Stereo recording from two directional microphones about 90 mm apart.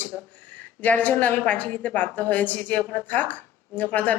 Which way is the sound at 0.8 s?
15° left (ahead or behind).